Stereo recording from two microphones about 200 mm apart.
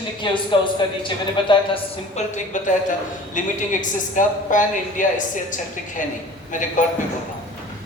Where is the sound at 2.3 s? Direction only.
35° left (ahead or behind).